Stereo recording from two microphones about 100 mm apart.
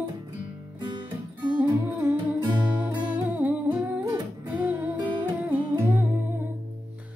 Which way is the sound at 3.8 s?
30° right (ahead or behind).